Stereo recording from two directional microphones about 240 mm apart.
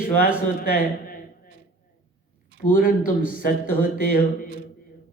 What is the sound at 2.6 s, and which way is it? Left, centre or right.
Speech, left.